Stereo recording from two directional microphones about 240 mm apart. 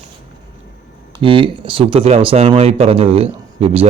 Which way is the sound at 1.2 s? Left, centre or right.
Right.